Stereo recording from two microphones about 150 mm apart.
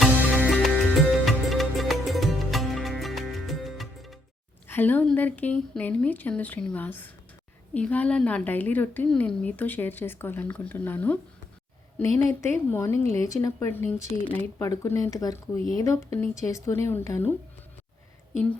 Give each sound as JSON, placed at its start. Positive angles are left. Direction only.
{"t": 0.0, "sound": "music", "side_deg": -5}
{"t": 4.7, "sound": "a woman's voice", "side_deg": 10}